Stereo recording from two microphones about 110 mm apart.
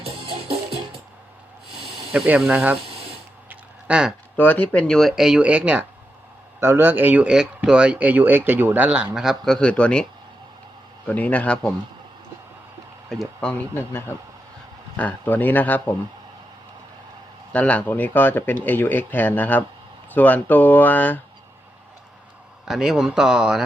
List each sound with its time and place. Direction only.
2.1 s a man's voice: 15° right (ahead or behind)
3.5 s a sound: 10° right (ahead or behind)
4.4 s a man's voice: 15° left (ahead or behind)
13.1 s speech: 5° left (ahead or behind)
14.9 s speech: 15° left (ahead or behind)
17.5 s speech: 15° left (ahead or behind)
22.6 s speech: 5° right (ahead or behind)